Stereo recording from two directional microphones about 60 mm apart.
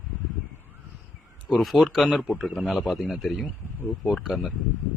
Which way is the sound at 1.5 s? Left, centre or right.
Centre.